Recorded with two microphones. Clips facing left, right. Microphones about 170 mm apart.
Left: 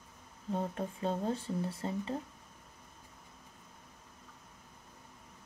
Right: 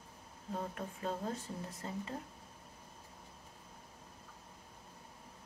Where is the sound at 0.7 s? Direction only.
30° left (ahead or behind).